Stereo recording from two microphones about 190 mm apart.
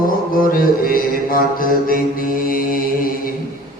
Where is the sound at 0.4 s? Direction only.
50° left (ahead or behind).